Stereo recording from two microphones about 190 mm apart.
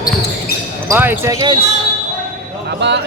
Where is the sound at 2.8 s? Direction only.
65° right (ahead or behind).